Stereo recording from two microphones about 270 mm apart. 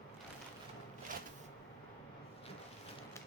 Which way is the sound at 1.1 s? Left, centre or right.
Right.